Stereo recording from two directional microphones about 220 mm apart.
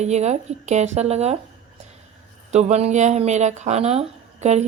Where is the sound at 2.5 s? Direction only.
30° right (ahead or behind).